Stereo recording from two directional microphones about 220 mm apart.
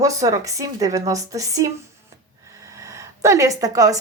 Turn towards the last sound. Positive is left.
turn(degrees=-15)  # may be behind; listen again after turning